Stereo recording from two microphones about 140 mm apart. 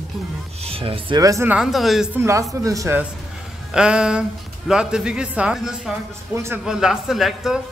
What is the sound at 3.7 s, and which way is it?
Speech, 5° right (ahead or behind).